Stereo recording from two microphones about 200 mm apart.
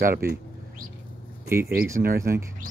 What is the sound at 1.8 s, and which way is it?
Speech, 45° right (ahead or behind).